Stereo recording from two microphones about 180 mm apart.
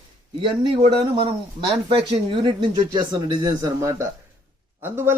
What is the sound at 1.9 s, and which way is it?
Speech, 25° right (ahead or behind).